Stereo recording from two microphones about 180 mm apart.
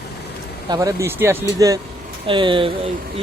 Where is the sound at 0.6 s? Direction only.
20° right (ahead or behind).